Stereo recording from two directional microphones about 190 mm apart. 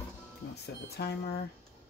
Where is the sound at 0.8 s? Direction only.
55° left (ahead or behind).